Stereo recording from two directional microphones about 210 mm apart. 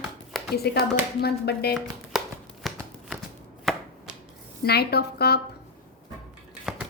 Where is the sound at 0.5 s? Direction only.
50° left (ahead or behind).